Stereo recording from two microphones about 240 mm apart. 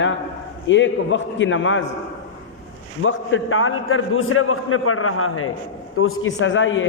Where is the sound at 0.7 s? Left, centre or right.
Left.